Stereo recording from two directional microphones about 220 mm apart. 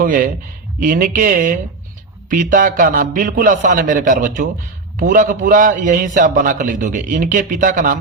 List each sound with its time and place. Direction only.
0.0 s a man's voice: 40° right (ahead or behind)